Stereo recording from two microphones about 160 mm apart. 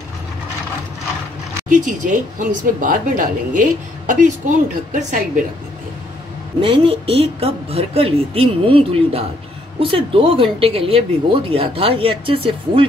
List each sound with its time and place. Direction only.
1.7 s a woman's voice: 55° right (ahead or behind)
6.6 s speech: 35° right (ahead or behind)